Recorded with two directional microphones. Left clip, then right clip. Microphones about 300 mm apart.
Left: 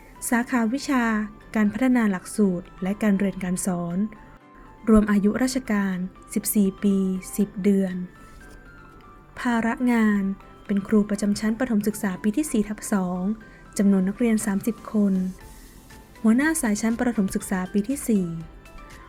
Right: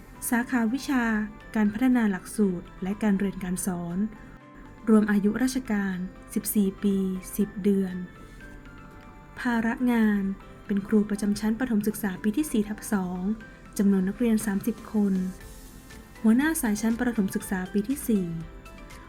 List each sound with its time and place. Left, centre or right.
0.3 s speech: left
4.9 s speech: left
9.3 s speech: left
16.2 s speech: left